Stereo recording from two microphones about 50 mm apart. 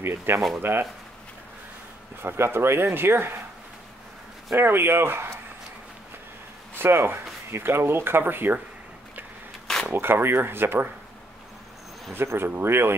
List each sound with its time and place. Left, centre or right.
0.0 s speech: right
2.2 s speech: right
4.6 s speech: right
6.8 s speech: right
9.9 s speech: right
12.1 s speech: right